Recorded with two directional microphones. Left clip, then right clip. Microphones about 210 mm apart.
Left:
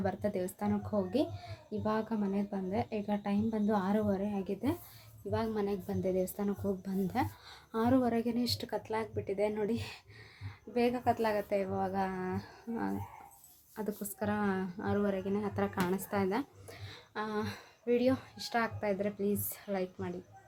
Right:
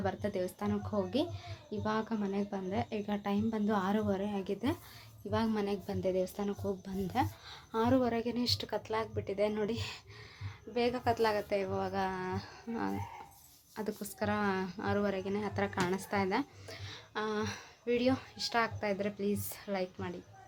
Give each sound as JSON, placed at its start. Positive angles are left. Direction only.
{"t": 0.0, "sound": "speech", "side_deg": 0}